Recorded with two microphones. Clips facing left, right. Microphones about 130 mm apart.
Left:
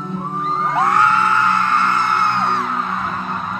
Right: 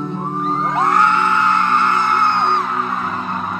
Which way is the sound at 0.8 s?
25° right (ahead or behind).